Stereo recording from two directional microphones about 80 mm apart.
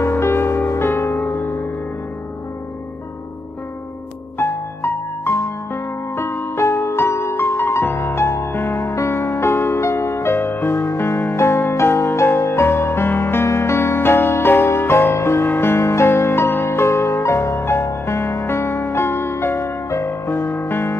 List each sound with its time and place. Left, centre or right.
0.0 s music: left
4.4 s music: left